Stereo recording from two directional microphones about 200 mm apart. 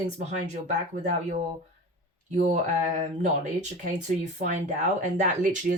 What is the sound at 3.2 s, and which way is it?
Speech, 35° right (ahead or behind).